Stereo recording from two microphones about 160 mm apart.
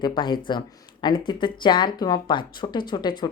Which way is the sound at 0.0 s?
25° left (ahead or behind).